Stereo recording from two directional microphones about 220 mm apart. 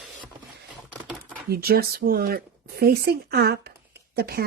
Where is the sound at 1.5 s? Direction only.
45° right (ahead or behind).